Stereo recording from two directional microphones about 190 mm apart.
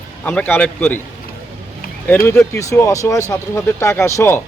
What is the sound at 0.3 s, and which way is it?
Speech, 10° left (ahead or behind).